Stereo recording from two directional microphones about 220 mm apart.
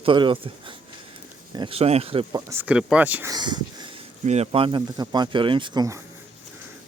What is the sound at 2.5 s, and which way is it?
Speech, 5° right (ahead or behind).